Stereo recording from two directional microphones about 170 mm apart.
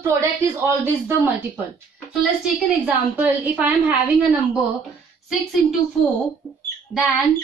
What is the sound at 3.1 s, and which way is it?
Speech, 10° right (ahead or behind).